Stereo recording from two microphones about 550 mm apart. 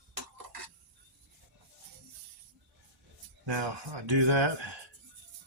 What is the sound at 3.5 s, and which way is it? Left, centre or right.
Speech, right.